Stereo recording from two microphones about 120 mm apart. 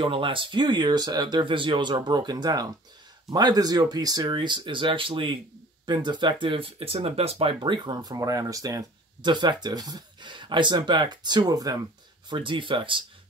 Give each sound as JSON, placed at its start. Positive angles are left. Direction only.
{"t": 0.0, "sound": "speech", "side_deg": -45}
{"t": 7.6, "sound": "speech", "side_deg": -40}
{"t": 12.4, "sound": "speech", "side_deg": -45}